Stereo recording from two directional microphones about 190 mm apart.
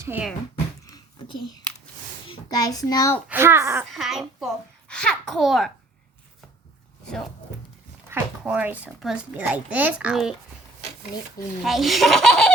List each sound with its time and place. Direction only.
0.0 s speech: 10° right (ahead or behind)
0.9 s a sound: 20° left (ahead or behind)
2.2 s a child's voice: 25° left (ahead or behind)
3.2 s a child's voice: 10° right (ahead or behind)
3.9 s a child's voice: centre (ahead or behind)
8.1 s speech: 10° right (ahead or behind)
11.6 s speech: centre (ahead or behind)